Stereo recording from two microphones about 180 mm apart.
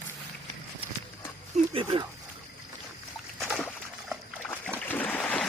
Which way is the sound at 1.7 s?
30° right (ahead or behind).